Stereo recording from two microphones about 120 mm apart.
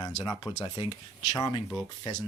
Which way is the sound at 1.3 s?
30° left (ahead or behind).